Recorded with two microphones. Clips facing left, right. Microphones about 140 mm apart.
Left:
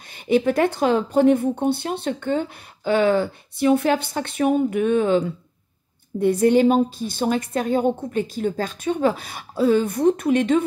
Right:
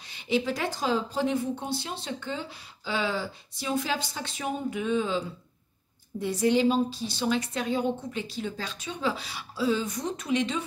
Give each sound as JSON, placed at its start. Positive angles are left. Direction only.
{"t": 0.1, "sound": "a woman's voice", "side_deg": 55}